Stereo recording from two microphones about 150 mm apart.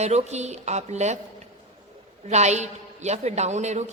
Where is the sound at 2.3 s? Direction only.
50° right (ahead or behind).